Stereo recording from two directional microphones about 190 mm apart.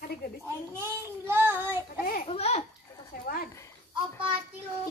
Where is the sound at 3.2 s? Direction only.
50° left (ahead or behind).